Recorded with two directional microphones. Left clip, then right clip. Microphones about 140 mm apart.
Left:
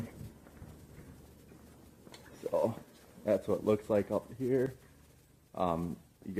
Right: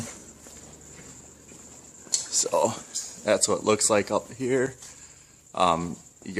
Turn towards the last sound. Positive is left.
turn(degrees=-25)  # may be behind; listen again after turning